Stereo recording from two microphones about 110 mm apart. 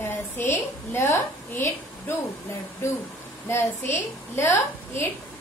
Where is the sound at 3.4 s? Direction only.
25° left (ahead or behind).